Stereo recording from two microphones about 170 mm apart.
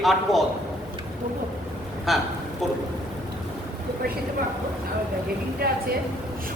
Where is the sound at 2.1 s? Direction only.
Centre (ahead or behind).